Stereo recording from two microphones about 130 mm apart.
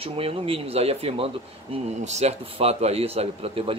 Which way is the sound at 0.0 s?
45° right (ahead or behind).